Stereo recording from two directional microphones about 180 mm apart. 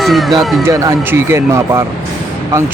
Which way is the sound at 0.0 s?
Centre (ahead or behind).